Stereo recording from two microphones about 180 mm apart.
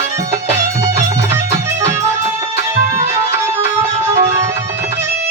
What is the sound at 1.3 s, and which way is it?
Music, 15° right (ahead or behind).